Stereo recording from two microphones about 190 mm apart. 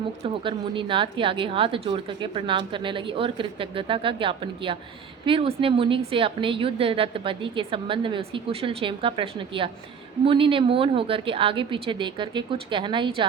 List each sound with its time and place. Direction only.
0.4 s a woman's voice: 25° right (ahead or behind)